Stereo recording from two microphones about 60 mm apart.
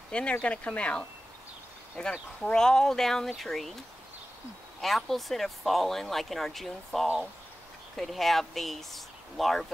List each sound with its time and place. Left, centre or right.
0.1 s speech: centre
4.8 s speech: centre